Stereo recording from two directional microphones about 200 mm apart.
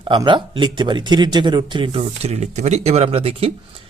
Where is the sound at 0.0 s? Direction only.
25° right (ahead or behind).